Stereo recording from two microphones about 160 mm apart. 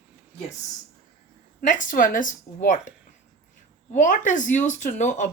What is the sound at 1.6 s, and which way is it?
Speech, 55° left (ahead or behind).